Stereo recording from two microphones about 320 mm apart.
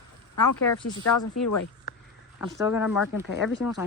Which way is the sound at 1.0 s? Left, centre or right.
Left.